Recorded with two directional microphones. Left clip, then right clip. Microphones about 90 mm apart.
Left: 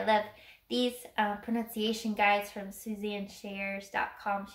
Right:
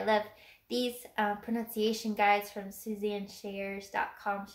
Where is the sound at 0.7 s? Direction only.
35° right (ahead or behind).